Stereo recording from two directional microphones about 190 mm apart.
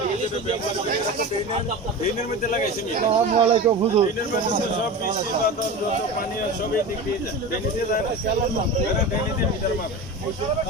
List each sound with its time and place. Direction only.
3.1 s speech: 30° right (ahead or behind)